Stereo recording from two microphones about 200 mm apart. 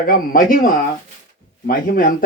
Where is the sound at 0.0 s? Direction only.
45° left (ahead or behind).